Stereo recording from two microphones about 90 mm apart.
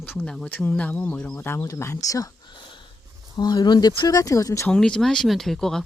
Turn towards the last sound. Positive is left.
turn(degrees=5)  # may be behind; listen again after turning